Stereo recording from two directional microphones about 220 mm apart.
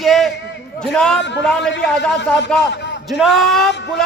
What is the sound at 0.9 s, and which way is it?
A man's voice, 5° left (ahead or behind).